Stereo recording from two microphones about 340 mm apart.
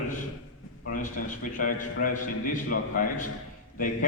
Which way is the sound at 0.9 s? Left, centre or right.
Left.